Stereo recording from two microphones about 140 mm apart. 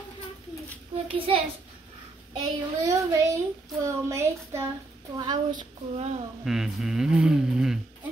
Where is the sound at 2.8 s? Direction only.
25° right (ahead or behind).